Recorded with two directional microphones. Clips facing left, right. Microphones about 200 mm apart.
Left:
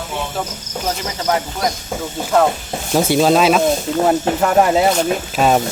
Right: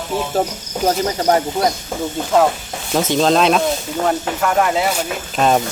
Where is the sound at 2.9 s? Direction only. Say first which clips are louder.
Left 2 dB; 10° left (ahead or behind).